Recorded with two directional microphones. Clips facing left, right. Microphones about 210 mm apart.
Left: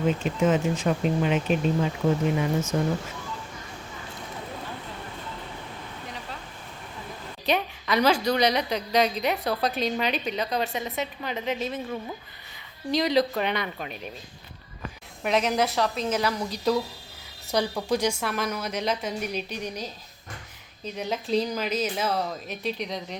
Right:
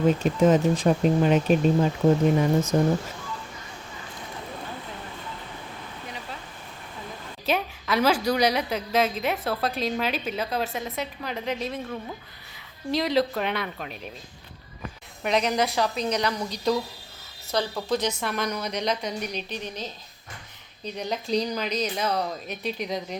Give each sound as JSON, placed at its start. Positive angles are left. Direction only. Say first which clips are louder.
{"t": 0.2, "sound": "speech", "louder": "right 4 dB", "side_deg": -40}
{"t": 7.4, "sound": "a woman's voice", "louder": "even", "side_deg": 0}
{"t": 15.2, "sound": "a woman's voice", "louder": "even", "side_deg": 5}